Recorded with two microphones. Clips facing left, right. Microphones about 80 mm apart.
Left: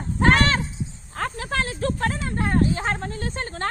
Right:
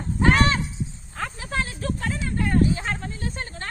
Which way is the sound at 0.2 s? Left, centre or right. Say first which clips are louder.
Left 1 dB; left.